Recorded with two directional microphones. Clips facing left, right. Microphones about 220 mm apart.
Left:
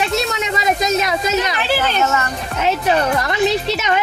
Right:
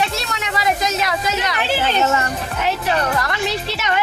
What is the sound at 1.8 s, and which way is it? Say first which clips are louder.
Speech: right 2 dB; 25° right (ahead or behind).